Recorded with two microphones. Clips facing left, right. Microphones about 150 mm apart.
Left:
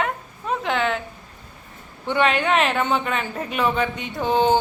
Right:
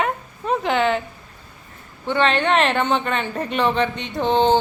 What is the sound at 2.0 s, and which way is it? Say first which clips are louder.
Speech: right 1 dB; 10° left (ahead or behind).